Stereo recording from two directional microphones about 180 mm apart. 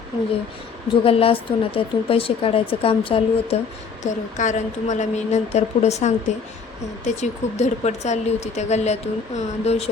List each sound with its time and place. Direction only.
1.0 s speech: 30° left (ahead or behind)
4.0 s speech: 45° left (ahead or behind)